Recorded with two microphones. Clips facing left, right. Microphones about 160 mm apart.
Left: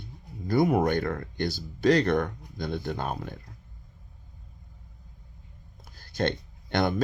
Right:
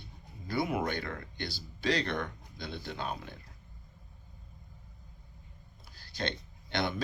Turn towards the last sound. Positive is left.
turn(degrees=50)  # may be behind; listen again after turning